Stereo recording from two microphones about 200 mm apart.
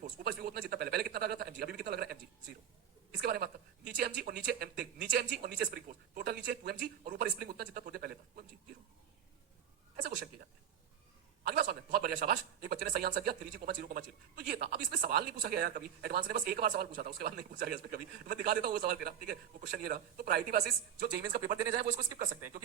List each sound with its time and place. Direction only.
0.0 s a sound: 50° right (ahead or behind)
3.2 s speech: 50° right (ahead or behind)
11.4 s speech: 50° right (ahead or behind)